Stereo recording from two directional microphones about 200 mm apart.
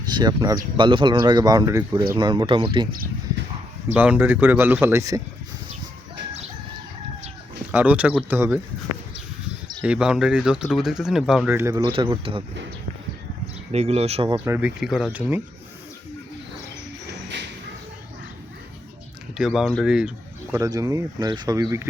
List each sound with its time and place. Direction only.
0.1 s speech: 20° right (ahead or behind)
3.9 s speech: 5° right (ahead or behind)
7.7 s speech: 10° right (ahead or behind)
9.8 s speech: 5° right (ahead or behind); by 12.4 s 25° right (ahead or behind)
13.7 s speech: 30° right (ahead or behind); by 15.4 s 5° right (ahead or behind)
19.4 s speech: centre (ahead or behind)
20.6 s speech: 15° right (ahead or behind)